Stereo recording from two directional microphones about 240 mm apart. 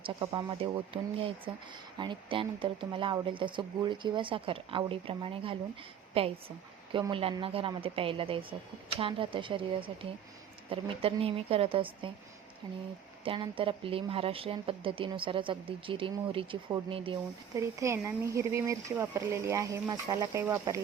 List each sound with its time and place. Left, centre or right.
0.0 s speech: centre
2.0 s speech: centre
13.2 s speech: right